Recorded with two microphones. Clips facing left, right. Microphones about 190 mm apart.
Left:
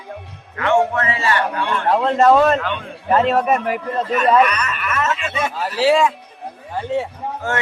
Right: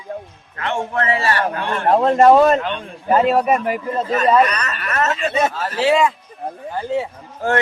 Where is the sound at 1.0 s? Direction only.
40° right (ahead or behind).